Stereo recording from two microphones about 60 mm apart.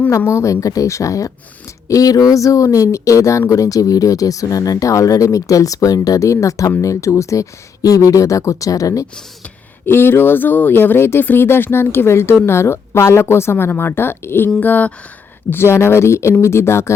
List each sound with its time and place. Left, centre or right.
0.3 s speech: left
1.9 s speech: left
3.5 s speech: left
9.8 s a woman's voice: left
14.6 s speech: left
15.4 s a woman's voice: left